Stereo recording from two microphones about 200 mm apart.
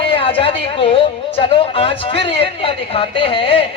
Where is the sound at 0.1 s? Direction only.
25° left (ahead or behind).